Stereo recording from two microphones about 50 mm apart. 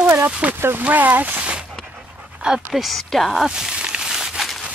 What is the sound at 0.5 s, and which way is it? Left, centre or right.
Speech, right.